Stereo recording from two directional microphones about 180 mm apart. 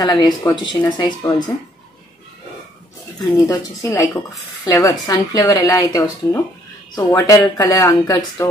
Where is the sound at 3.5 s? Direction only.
15° left (ahead or behind).